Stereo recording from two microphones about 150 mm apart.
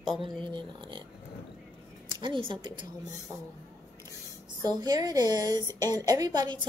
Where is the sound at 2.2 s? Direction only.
35° right (ahead or behind).